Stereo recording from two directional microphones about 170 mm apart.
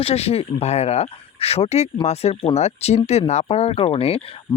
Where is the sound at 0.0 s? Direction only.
35° left (ahead or behind).